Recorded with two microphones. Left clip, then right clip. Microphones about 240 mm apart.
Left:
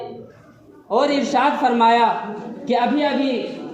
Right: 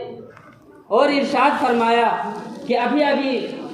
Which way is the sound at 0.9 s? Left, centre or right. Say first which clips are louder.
Right 1 dB; left.